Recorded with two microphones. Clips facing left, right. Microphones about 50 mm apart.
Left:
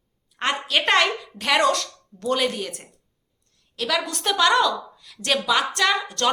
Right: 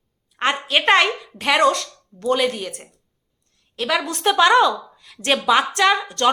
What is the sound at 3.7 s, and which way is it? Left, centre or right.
A woman's voice, right.